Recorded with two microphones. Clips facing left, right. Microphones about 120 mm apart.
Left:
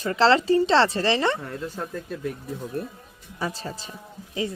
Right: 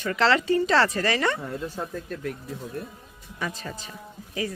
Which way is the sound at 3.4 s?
30° left (ahead or behind).